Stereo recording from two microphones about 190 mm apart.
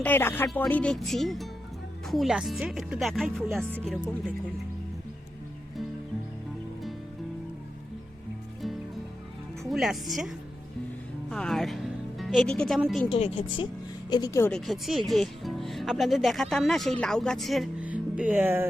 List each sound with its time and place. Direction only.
0.0 s speech: 10° left (ahead or behind)
9.6 s speech: centre (ahead or behind)
13.1 s speech: 30° left (ahead or behind)
14.1 s speech: 20° left (ahead or behind)
14.7 s speech: centre (ahead or behind)